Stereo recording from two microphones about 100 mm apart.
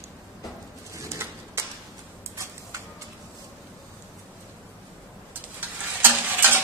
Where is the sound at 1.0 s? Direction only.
30° right (ahead or behind).